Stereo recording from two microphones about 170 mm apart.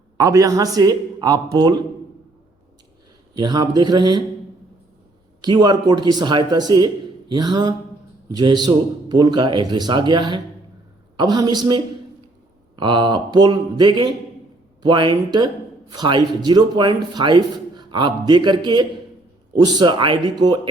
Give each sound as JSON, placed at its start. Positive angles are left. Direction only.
{"t": 0.2, "sound": "speech", "side_deg": -20}
{"t": 3.3, "sound": "speech", "side_deg": -25}
{"t": 5.4, "sound": "speech", "side_deg": -25}